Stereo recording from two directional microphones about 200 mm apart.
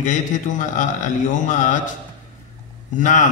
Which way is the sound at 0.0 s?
40° left (ahead or behind).